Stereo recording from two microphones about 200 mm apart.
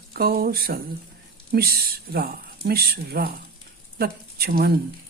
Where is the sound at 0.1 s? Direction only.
50° right (ahead or behind).